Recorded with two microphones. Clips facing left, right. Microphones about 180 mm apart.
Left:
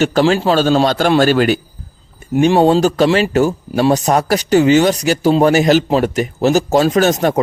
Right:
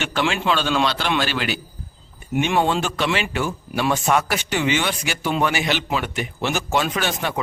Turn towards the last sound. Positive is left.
turn(degrees=40)  # may be behind; listen again after turning